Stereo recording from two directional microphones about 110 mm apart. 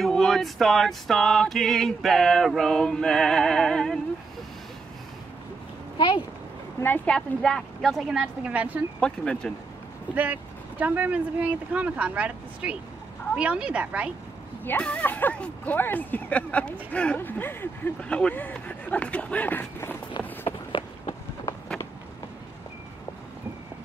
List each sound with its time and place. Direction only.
0.0 s music: 5° left (ahead or behind)
5.9 s speech: 45° left (ahead or behind)
7.1 s music: 5° left (ahead or behind); by 8.7 s 10° right (ahead or behind)
9.0 s speech: 10° left (ahead or behind)
10.1 s speech: 15° right (ahead or behind)
14.6 s speech: 15° left (ahead or behind)